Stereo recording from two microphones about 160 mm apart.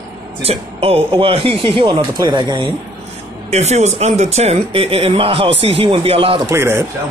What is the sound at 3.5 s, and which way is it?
Speech, 45° right (ahead or behind).